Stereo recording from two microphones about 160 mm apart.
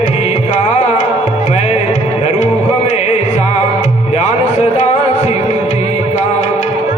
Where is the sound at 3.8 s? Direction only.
45° left (ahead or behind).